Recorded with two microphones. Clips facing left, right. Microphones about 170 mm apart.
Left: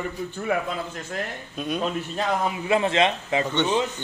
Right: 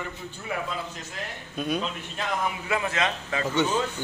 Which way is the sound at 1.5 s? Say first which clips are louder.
Right 1 dB; centre (ahead or behind).